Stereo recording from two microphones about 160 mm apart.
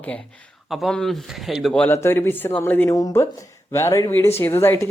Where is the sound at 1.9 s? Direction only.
15° left (ahead or behind).